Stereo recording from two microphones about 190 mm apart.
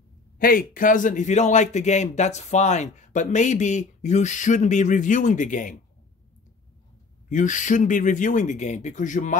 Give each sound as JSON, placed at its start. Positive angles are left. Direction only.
{"t": 0.4, "sound": "a man's voice", "side_deg": 50}
{"t": 7.2, "sound": "a man's voice", "side_deg": 40}